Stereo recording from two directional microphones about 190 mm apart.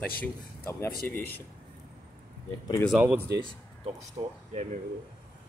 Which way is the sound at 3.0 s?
10° right (ahead or behind).